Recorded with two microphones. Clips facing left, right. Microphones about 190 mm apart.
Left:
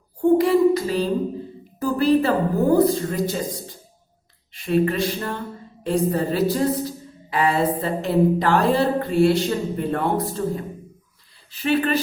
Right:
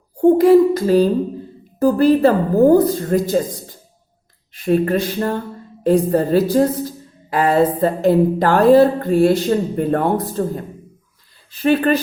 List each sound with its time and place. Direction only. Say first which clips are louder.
0.2 s a sound: right 6 dB; 45° right (ahead or behind)
1.8 s a woman's voice: right 6 dB; 40° right (ahead or behind)
4.6 s a woman's voice: right 4 dB; 45° right (ahead or behind)
11.6 s a woman's voice: right 6 dB; 45° right (ahead or behind)